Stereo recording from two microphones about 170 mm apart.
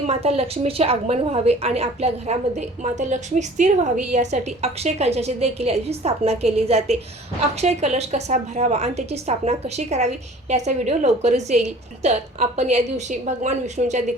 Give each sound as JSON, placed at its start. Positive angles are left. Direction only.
{"t": 0.0, "sound": "a woman's voice", "side_deg": -40}